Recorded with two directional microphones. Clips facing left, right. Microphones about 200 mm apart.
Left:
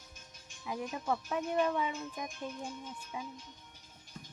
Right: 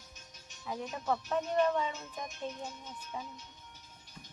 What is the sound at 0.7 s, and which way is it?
Speech, 10° left (ahead or behind).